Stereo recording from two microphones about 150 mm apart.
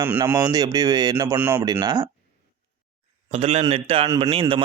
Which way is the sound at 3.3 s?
40° right (ahead or behind).